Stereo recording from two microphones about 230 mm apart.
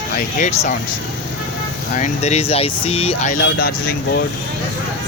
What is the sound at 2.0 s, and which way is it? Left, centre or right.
Speech, left.